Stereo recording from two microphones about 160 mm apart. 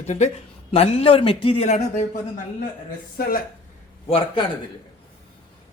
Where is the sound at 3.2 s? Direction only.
70° left (ahead or behind).